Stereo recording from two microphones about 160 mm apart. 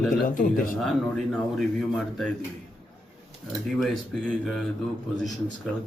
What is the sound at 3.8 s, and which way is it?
Speech, 5° left (ahead or behind).